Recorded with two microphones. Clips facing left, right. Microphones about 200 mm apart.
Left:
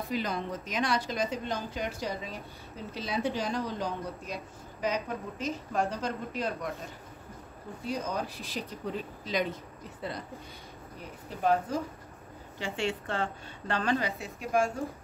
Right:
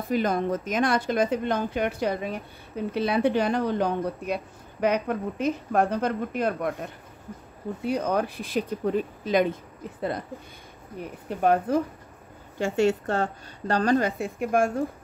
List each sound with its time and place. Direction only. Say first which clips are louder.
0.1 s speech: right 10 dB; 50° right (ahead or behind)
11.2 s speech: right 5 dB; 60° right (ahead or behind)
12.5 s a woman's voice: right 10 dB; 45° right (ahead or behind)